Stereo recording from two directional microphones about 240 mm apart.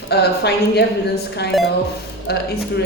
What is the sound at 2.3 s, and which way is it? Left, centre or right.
Speech, left.